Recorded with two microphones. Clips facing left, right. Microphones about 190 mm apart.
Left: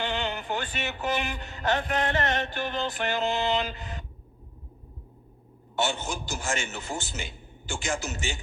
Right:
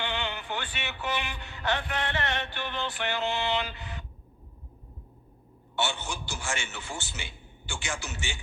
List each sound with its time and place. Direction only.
0.0 s music: 40° left (ahead or behind)
5.7 s a man's voice: 40° left (ahead or behind)